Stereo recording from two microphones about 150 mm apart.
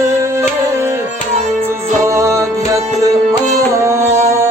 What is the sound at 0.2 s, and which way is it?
Music, 15° right (ahead or behind).